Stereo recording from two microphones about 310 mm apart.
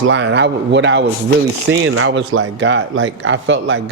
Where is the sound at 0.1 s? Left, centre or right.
Right.